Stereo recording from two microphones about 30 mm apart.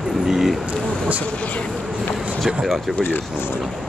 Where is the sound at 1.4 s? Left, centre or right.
Left.